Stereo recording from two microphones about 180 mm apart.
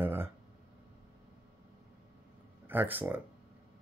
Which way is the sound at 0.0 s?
10° right (ahead or behind).